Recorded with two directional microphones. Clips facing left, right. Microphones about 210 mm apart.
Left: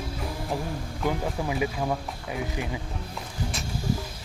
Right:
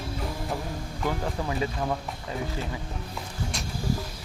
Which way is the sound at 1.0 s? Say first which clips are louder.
Left 2 dB; 10° left (ahead or behind).